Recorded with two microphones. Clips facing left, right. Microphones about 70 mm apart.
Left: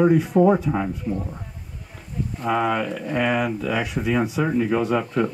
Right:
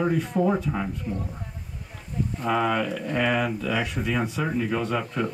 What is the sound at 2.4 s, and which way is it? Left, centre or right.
Speech, centre.